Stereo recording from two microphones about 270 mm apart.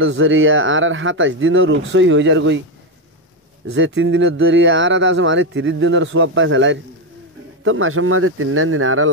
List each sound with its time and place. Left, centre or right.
0.0 s speech: right
3.7 s speech: right